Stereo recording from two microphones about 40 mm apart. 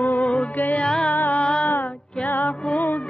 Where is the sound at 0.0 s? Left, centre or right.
Left.